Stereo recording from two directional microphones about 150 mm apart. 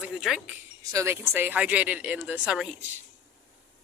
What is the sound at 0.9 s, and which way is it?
A woman's voice, 15° right (ahead or behind).